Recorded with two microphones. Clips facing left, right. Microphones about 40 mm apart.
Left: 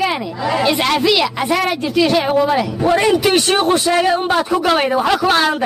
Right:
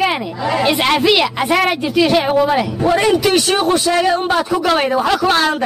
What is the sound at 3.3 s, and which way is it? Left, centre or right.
Speech, left.